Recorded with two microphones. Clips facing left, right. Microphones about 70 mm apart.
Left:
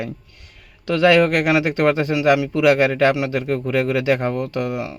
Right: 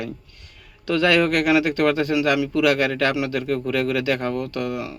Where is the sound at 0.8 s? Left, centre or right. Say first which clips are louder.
Left 3 dB; centre.